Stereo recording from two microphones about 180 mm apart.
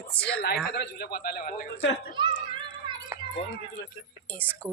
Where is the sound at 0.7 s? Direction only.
60° left (ahead or behind).